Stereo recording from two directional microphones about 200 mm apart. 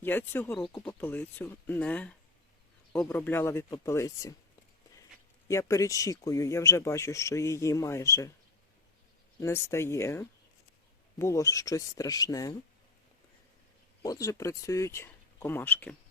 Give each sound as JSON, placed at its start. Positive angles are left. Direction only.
{"t": 0.0, "sound": "speech", "side_deg": 10}
{"t": 5.5, "sound": "speech", "side_deg": 15}
{"t": 9.4, "sound": "speech", "side_deg": 15}
{"t": 14.0, "sound": "speech", "side_deg": 15}